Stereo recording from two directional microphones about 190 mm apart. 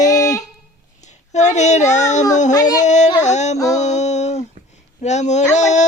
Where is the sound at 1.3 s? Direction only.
35° left (ahead or behind).